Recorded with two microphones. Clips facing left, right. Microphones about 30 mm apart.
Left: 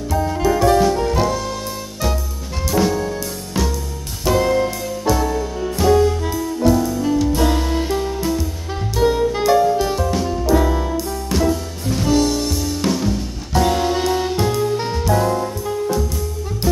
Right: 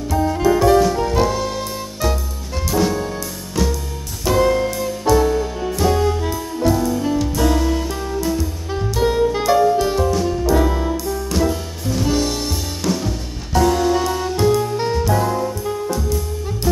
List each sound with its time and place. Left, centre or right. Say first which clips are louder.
0.1 s music: right 2 dB; centre
3.6 s music: right 1 dB; centre
4.3 s music: even; centre
7.3 s music: even; centre
8.3 s music: even; centre
12.1 s music: left 4 dB; centre
12.9 s music: left 2 dB; centre
13.7 s music: right 1 dB; left
14.3 s music: right 1 dB; centre